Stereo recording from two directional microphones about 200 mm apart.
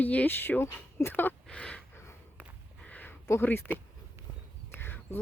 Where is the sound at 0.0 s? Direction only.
10° left (ahead or behind).